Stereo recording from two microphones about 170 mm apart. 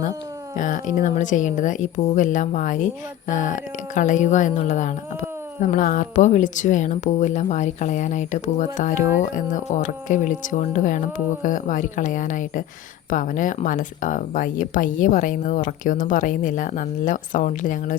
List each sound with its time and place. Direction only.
0.5 s speech: 50° left (ahead or behind)